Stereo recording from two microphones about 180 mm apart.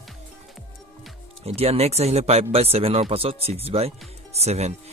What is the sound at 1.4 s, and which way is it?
Speech, 35° right (ahead or behind).